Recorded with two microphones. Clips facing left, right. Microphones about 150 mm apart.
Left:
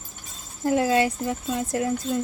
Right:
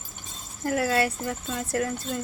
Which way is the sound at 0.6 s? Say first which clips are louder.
Left 4 dB; 20° left (ahead or behind).